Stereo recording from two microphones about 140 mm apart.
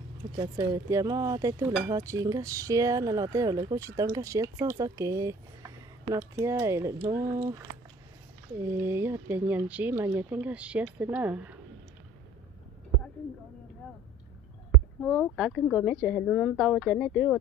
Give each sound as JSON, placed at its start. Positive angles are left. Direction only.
{"t": 0.4, "sound": "speech", "side_deg": -30}
{"t": 8.6, "sound": "speech", "side_deg": -15}
{"t": 15.0, "sound": "a woman's voice", "side_deg": 0}